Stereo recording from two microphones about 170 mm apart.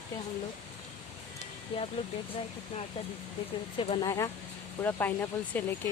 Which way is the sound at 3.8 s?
35° left (ahead or behind).